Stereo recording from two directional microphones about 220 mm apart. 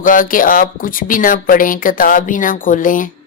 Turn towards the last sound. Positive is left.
turn(degrees=35)  # may be behind; listen again after turning